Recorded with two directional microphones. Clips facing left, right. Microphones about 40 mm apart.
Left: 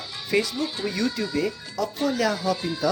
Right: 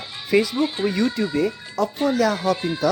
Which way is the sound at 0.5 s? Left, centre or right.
Right.